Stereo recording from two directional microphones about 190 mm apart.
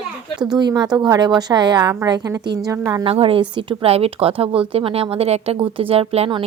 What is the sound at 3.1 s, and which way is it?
A woman's voice, 30° right (ahead or behind).